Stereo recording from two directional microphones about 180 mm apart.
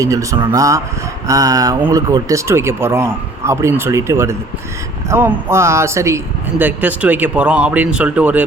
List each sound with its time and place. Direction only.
0.0 s speech: 20° right (ahead or behind)